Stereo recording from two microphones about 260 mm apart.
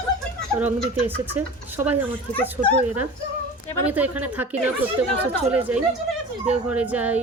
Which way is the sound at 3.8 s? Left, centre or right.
Centre.